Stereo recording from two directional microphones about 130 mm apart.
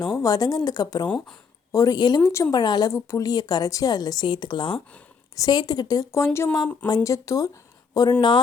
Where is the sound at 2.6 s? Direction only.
30° left (ahead or behind).